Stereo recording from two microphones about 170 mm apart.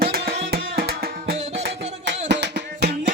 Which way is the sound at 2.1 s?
90° right.